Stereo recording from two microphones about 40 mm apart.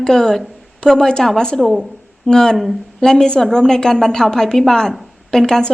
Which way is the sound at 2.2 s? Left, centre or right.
Centre.